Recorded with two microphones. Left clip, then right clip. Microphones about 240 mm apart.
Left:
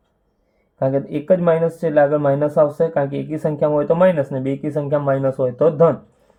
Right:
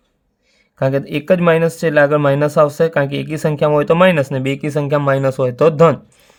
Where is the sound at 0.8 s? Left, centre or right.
Right.